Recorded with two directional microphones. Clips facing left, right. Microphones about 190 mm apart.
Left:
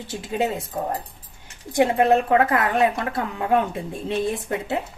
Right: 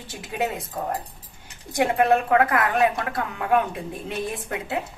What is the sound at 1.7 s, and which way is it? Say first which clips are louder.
A woman's voice: left 2 dB; 25° left (ahead or behind).